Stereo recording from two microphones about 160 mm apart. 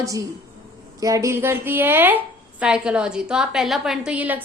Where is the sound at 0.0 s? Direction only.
20° right (ahead or behind).